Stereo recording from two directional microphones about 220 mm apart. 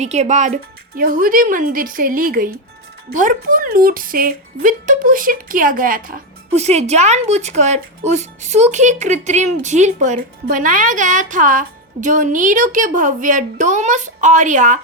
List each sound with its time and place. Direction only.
0.0 s a woman's voice: 30° right (ahead or behind)